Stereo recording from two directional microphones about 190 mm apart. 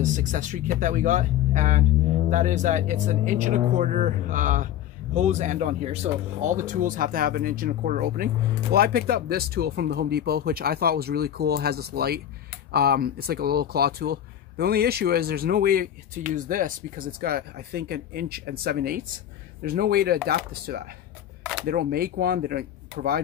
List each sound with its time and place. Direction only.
0.0 s speech: 40° right (ahead or behind)